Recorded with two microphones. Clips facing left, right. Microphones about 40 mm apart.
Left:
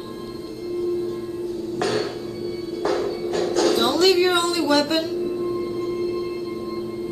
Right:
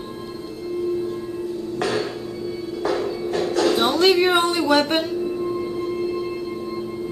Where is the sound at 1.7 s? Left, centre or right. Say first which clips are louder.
Even; centre.